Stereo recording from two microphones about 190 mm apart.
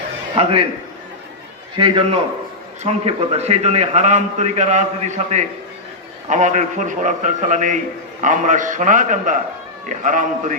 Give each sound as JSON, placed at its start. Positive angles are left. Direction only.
{"t": 0.4, "sound": "a man's voice", "side_deg": -30}
{"t": 1.7, "sound": "a man's voice", "side_deg": -25}